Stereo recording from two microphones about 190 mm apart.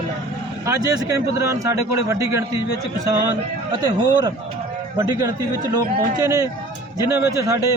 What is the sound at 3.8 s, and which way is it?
Speech, 20° right (ahead or behind).